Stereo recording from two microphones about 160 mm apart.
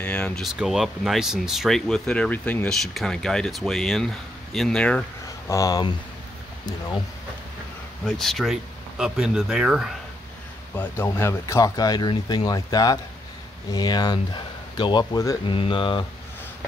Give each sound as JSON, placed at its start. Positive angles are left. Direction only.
{"t": 0.0, "sound": "speech", "side_deg": 5}
{"t": 5.5, "sound": "speech", "side_deg": 20}
{"t": 8.2, "sound": "speech", "side_deg": 0}
{"t": 10.8, "sound": "speech", "side_deg": 15}